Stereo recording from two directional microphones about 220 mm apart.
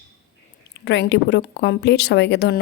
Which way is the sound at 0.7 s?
50° left (ahead or behind).